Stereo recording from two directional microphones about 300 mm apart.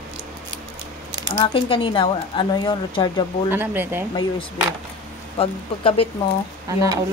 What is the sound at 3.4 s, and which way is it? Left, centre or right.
Speech, centre.